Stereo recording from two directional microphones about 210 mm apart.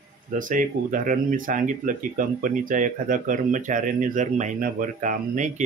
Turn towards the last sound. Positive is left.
turn(degrees=-35)  # may be behind; listen again after turning